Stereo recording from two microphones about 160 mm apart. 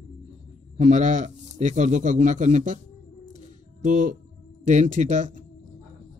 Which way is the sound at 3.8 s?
50° right (ahead or behind).